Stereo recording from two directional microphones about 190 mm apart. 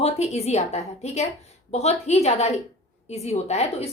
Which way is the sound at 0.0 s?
35° left (ahead or behind).